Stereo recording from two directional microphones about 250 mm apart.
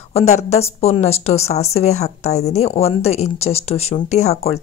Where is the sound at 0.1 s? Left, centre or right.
Left.